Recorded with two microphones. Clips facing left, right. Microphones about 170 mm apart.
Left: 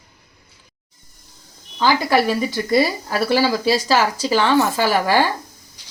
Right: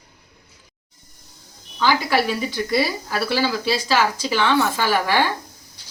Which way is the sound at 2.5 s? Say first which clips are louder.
Left 3 dB; 45° left (ahead or behind).